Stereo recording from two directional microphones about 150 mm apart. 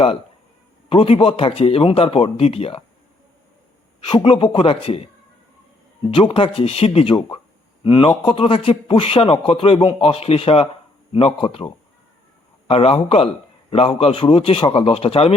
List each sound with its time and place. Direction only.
0.9 s a man's voice: 40° left (ahead or behind)
4.1 s a man's voice: 35° left (ahead or behind)